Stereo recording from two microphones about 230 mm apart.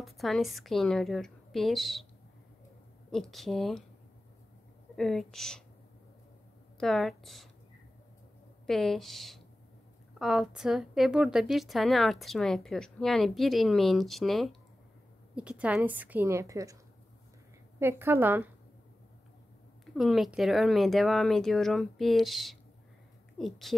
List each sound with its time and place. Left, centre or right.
0.0 s a woman's voice: centre
3.1 s a woman's voice: centre
4.9 s a woman's voice: centre
6.8 s a woman's voice: centre
8.6 s a woman's voice: centre
17.7 s a woman's voice: centre
19.9 s a woman's voice: centre